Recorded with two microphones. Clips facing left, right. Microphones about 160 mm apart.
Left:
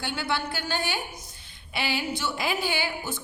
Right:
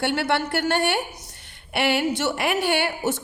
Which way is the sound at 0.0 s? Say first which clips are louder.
Right 7 dB; 75° right (ahead or behind).